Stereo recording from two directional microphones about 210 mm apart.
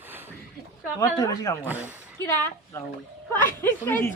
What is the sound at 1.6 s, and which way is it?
Speech, 10° right (ahead or behind).